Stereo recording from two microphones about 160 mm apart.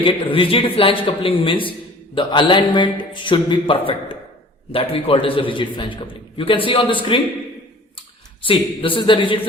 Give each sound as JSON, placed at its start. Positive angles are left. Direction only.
{"t": 0.0, "sound": "a man's voice", "side_deg": 30}
{"t": 8.4, "sound": "a man's voice", "side_deg": 35}